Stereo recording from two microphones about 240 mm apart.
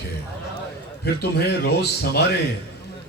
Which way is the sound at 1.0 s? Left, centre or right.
Left.